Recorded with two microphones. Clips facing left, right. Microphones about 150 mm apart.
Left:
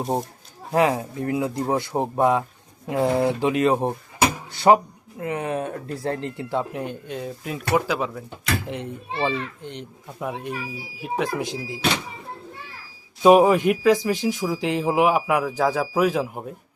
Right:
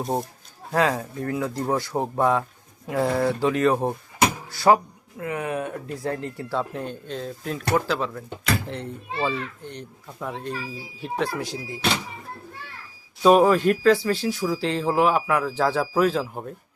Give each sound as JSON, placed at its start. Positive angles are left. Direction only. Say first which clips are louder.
{"t": 0.7, "sound": "speech", "louder": "left 2 dB", "side_deg": 15}
{"t": 13.2, "sound": "speech", "louder": "left 2 dB", "side_deg": 15}